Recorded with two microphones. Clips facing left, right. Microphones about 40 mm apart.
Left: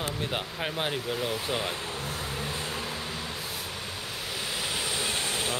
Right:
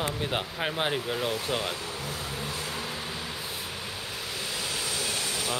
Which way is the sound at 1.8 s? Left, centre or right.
Left.